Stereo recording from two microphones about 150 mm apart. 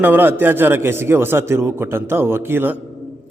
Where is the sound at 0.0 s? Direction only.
15° right (ahead or behind).